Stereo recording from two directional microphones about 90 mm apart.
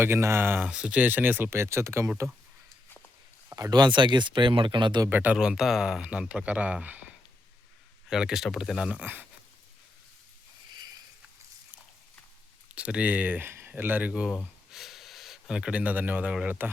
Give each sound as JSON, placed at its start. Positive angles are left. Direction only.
{"t": 0.0, "sound": "speech", "side_deg": -30}
{"t": 0.7, "sound": "speech", "side_deg": -10}
{"t": 3.5, "sound": "speech", "side_deg": -50}
{"t": 5.0, "sound": "speech", "side_deg": -20}
{"t": 5.4, "sound": "speech", "side_deg": -5}
{"t": 8.1, "sound": "speech", "side_deg": -5}
{"t": 12.7, "sound": "speech", "side_deg": -15}
{"t": 14.3, "sound": "speech", "side_deg": -5}